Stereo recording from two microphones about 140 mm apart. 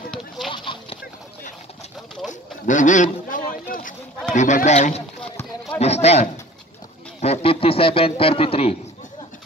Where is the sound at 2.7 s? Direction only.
65° left (ahead or behind).